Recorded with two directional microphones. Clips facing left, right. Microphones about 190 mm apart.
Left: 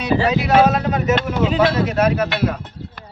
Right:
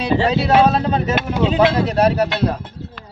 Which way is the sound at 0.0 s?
30° right (ahead or behind).